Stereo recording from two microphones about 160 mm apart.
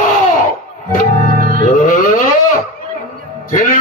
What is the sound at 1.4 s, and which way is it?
Music, 65° right (ahead or behind).